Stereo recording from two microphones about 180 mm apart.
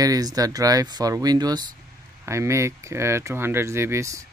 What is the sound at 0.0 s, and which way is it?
Speech, 20° right (ahead or behind).